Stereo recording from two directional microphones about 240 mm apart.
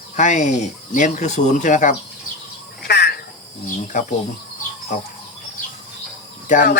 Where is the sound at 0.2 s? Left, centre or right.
Left.